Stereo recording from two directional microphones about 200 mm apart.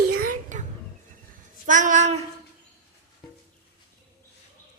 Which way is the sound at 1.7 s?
40° right (ahead or behind).